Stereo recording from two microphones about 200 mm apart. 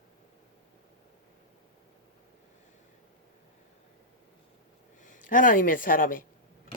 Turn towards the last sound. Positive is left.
turn(degrees=45)  # may be behind; listen again after turning